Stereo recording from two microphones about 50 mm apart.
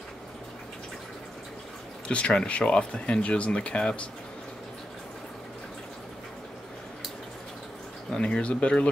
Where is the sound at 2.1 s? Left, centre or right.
Left.